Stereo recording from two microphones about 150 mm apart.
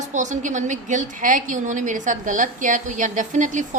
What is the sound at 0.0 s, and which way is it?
A woman's voice, 55° right (ahead or behind).